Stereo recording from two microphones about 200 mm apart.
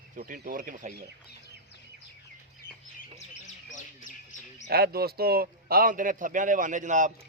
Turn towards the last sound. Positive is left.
turn(degrees=-40)  # may be behind; listen again after turning